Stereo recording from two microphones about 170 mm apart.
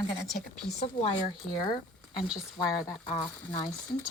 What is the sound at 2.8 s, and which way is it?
Speech, 25° left (ahead or behind).